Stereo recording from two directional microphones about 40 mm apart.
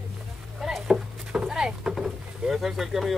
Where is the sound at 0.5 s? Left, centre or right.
Centre.